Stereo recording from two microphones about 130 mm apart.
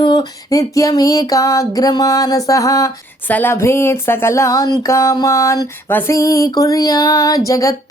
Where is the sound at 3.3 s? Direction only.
15° left (ahead or behind).